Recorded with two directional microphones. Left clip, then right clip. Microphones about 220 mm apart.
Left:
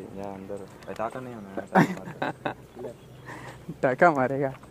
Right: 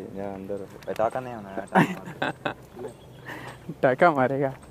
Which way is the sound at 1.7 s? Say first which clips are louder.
Even; 5° left (ahead or behind).